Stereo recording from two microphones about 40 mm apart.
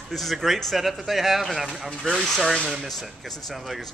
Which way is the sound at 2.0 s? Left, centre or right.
Centre.